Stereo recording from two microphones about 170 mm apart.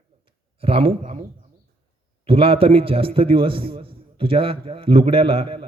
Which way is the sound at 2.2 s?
35° right (ahead or behind).